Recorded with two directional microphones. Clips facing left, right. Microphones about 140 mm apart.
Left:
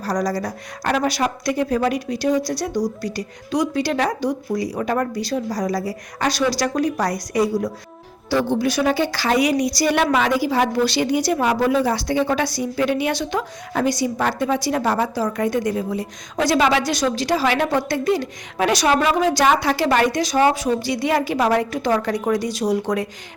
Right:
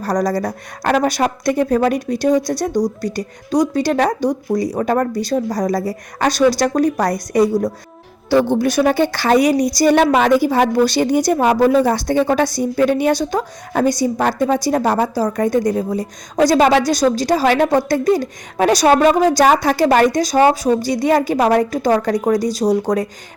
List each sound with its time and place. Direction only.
0.0 s a woman's voice: 50° right (ahead or behind)